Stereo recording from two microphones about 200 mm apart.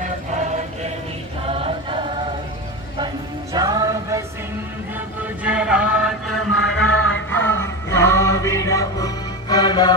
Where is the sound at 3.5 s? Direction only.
20° right (ahead or behind).